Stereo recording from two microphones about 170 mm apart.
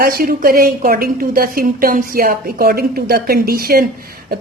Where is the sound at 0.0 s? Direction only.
60° right (ahead or behind).